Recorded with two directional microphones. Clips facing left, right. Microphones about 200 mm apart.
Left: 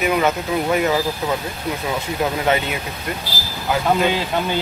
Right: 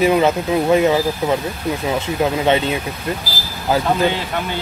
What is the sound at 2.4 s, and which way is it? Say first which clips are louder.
Speech: right 3 dB; 25° right (ahead or behind).